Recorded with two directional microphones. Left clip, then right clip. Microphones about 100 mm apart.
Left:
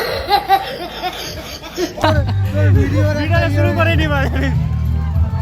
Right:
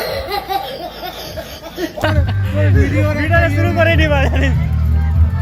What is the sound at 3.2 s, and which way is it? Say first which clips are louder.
Speech: right 5 dB; 20° left (ahead or behind).